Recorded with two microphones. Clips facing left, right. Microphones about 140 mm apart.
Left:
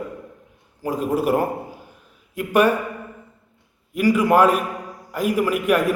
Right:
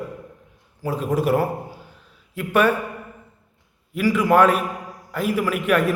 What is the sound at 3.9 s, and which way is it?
A man's voice, 15° left (ahead or behind).